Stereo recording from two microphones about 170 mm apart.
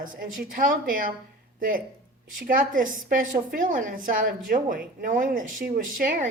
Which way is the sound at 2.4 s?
55° right (ahead or behind).